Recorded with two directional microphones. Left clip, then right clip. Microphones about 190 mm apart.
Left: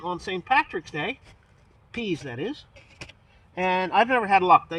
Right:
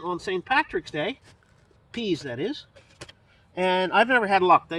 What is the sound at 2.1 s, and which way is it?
Speech, 45° right (ahead or behind).